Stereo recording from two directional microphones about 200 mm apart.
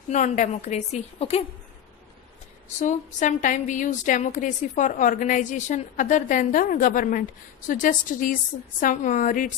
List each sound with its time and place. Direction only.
0.1 s a woman's voice: 35° left (ahead or behind)
2.8 s a woman's voice: 40° left (ahead or behind)